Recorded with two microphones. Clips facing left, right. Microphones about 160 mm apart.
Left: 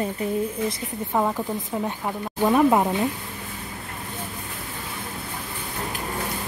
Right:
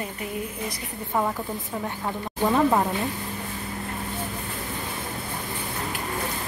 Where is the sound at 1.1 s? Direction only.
20° left (ahead or behind).